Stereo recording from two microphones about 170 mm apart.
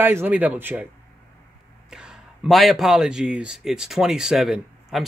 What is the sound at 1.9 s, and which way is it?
Speech, 5° right (ahead or behind).